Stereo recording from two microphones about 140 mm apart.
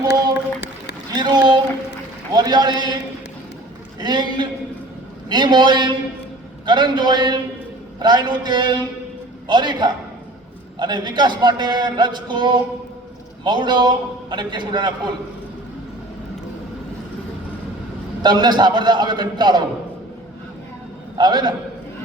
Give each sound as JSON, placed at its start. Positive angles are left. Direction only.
{"t": 1.1, "sound": "a sound", "side_deg": -30}
{"t": 2.3, "sound": "a man's voice", "side_deg": -30}
{"t": 4.0, "sound": "a man's voice", "side_deg": -30}
{"t": 18.2, "sound": "a man's voice", "side_deg": -30}
{"t": 21.2, "sound": "a man's voice", "side_deg": -30}